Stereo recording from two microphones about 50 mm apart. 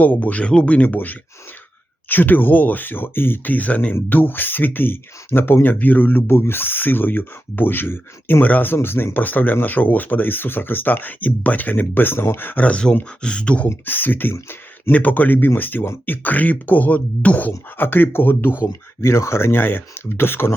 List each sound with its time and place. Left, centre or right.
0.0 s speech: left
4.1 s speech: left
12.5 s speech: left
12.7 s speech: left
13.8 s speech: left
18.6 s speech: left